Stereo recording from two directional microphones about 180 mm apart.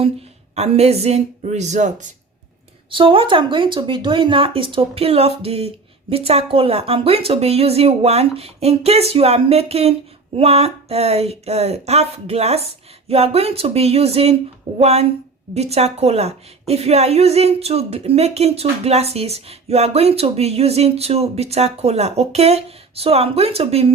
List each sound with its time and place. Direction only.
0.5 s a woman's voice: 35° right (ahead or behind)
2.9 s a woman's voice: 30° right (ahead or behind)